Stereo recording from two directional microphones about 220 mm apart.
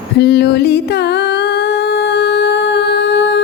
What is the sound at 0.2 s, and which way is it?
Singing, 50° left (ahead or behind).